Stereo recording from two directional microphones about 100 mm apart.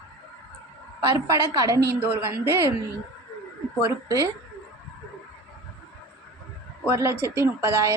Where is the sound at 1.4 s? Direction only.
35° right (ahead or behind).